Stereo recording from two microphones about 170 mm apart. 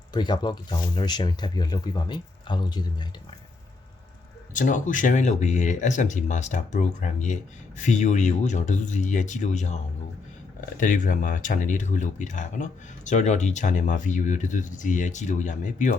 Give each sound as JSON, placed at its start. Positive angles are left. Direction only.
{"t": 0.1, "sound": "speech", "side_deg": 25}
{"t": 4.5, "sound": "speech", "side_deg": 50}
{"t": 10.8, "sound": "speech", "side_deg": 50}